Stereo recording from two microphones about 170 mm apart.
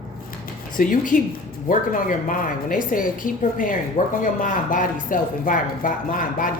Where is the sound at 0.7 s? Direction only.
55° left (ahead or behind).